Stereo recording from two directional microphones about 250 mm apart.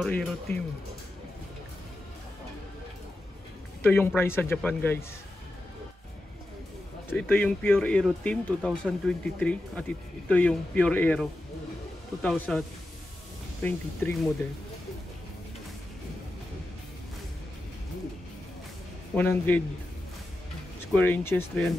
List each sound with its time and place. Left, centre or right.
0.0 s speech: centre
0.5 s speech: left
3.8 s a man's voice: centre
7.1 s speech: centre
13.7 s a man's voice: centre
19.1 s a man's voice: centre
20.9 s a man's voice: centre